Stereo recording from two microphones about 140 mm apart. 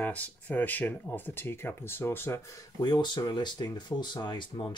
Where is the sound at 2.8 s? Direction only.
30° left (ahead or behind).